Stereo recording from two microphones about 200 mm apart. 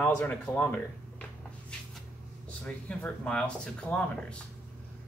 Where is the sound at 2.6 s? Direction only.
5° left (ahead or behind).